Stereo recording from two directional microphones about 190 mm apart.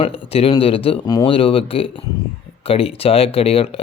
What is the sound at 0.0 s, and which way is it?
Speech, 30° left (ahead or behind).